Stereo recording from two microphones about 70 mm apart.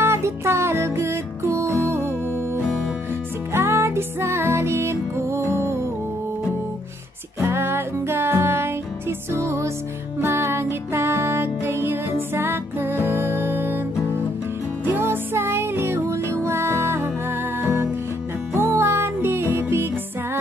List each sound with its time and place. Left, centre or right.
0.0 s music: right
3.5 s music: right
7.3 s music: right
14.9 s music: right